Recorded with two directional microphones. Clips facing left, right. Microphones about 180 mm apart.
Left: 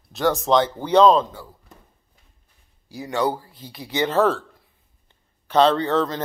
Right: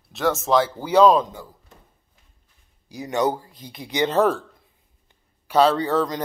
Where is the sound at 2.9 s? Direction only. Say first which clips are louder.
Right 1 dB; 20° right (ahead or behind).